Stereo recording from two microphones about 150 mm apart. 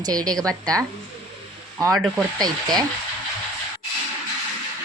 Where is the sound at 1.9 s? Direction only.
Centre (ahead or behind).